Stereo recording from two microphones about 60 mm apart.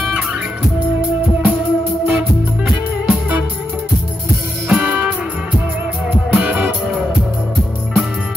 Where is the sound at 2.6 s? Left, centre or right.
Right.